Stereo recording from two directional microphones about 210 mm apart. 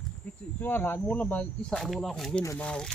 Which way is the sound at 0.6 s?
10° left (ahead or behind).